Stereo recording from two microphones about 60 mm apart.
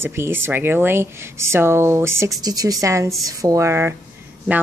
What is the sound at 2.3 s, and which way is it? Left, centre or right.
A woman's voice, right.